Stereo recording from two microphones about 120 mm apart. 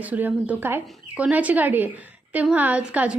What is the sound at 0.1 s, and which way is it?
A woman's voice, 15° right (ahead or behind).